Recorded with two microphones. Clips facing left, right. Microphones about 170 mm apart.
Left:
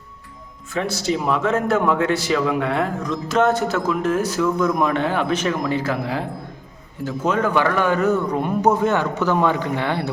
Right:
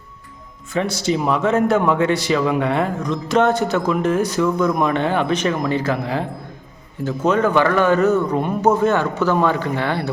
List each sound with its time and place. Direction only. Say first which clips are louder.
0.7 s a man's voice: right 2 dB; centre (ahead or behind)
8.1 s a man's voice: right 2 dB; centre (ahead or behind)
8.6 s speech: right 2 dB; 15° left (ahead or behind)